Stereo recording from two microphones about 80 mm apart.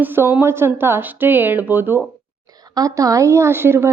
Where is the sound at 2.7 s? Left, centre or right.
Right.